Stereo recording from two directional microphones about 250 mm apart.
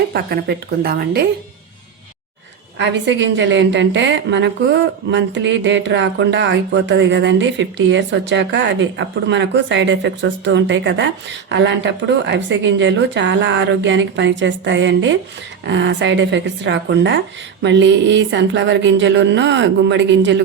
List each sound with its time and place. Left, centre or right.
0.1 s a woman's voice: right
2.7 s a woman's voice: right